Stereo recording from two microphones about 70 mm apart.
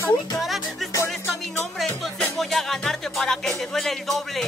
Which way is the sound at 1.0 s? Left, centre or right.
Left.